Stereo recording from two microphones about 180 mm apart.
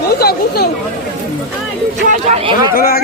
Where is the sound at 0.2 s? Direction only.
60° left (ahead or behind).